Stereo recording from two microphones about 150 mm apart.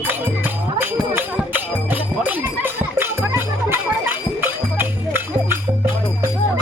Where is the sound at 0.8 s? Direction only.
15° right (ahead or behind).